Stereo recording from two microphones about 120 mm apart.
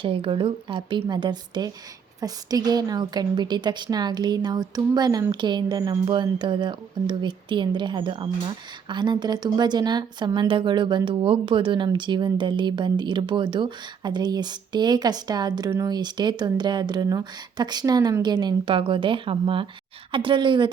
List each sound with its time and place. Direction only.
0.0 s a woman's voice: 45° right (ahead or behind)